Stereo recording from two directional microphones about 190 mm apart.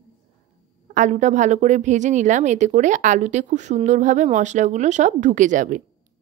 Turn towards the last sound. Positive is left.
turn(degrees=-40)  # may be behind; listen again after turning